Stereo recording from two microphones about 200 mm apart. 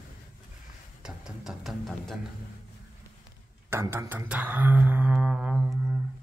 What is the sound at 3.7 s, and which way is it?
Speech, 15° right (ahead or behind).